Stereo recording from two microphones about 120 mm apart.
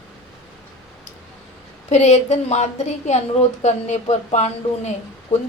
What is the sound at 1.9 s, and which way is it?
A woman's voice, 65° left (ahead or behind).